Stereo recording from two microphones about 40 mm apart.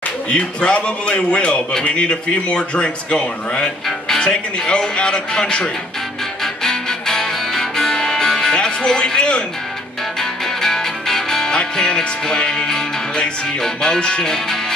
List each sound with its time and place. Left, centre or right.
0.3 s a man's voice: left
6.4 s music: centre
10.4 s music: centre